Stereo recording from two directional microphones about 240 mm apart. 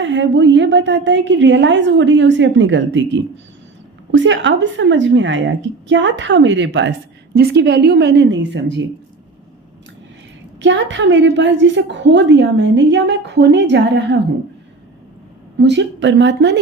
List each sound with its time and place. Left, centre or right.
0.0 s a woman's voice: right
10.6 s a woman's voice: right
15.5 s a woman's voice: right